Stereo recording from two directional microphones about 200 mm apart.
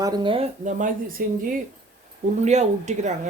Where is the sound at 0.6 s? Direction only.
45° right (ahead or behind).